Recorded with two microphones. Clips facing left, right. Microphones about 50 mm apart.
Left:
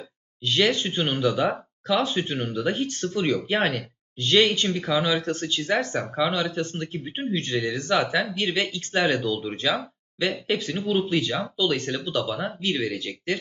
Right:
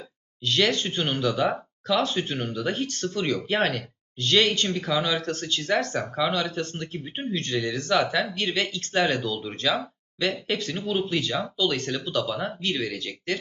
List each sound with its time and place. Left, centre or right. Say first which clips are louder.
0.4 s speech: left 1 dB; centre